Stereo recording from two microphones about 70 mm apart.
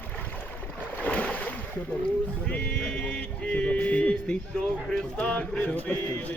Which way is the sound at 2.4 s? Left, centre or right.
Centre.